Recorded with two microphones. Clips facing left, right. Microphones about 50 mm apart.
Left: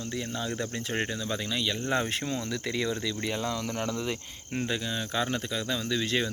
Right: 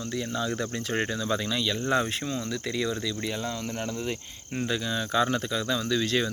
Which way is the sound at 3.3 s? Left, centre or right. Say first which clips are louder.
Left 1 dB; left.